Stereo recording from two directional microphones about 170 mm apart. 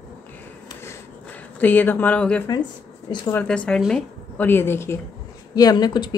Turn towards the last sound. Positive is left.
turn(degrees=25)  # may be behind; listen again after turning